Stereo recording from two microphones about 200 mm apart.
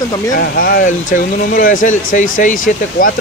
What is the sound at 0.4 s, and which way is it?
Speech, 50° left (ahead or behind).